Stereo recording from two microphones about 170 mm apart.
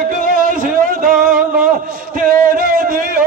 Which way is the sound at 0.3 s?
55° right (ahead or behind).